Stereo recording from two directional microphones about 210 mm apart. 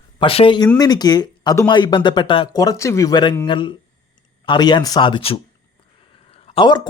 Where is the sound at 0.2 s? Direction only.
25° left (ahead or behind).